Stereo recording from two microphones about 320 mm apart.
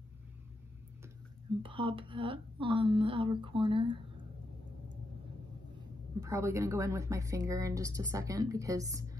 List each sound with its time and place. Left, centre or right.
1.6 s speech: centre
6.2 s speech: centre